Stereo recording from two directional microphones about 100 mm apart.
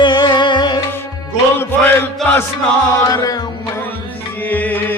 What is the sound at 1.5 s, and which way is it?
Music, 25° left (ahead or behind).